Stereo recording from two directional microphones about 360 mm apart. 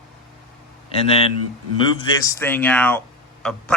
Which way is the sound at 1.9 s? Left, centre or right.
Centre.